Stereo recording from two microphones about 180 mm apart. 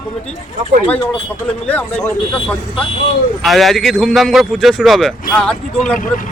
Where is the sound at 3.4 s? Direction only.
Centre (ahead or behind).